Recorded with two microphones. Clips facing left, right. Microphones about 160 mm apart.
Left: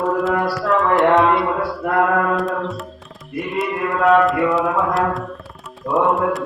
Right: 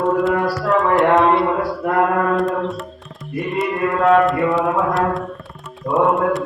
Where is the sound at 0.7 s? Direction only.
Centre (ahead or behind).